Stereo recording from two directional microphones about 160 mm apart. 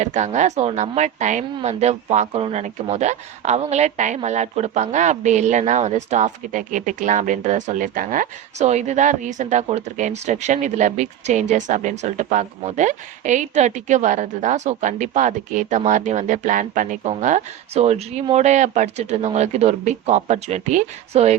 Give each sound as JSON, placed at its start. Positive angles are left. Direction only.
{"t": 0.0, "sound": "speech", "side_deg": -45}